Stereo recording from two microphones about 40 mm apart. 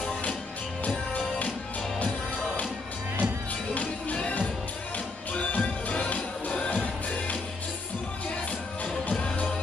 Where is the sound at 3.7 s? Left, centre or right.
Left.